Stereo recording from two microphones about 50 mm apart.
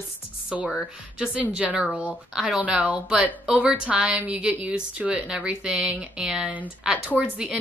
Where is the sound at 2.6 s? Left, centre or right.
Right.